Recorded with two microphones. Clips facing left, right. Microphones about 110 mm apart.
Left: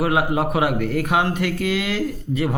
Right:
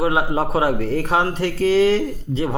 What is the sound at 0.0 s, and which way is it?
Speech, 25° right (ahead or behind).